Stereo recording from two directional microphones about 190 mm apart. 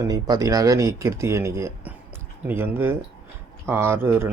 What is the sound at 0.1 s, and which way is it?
Speech, 20° right (ahead or behind).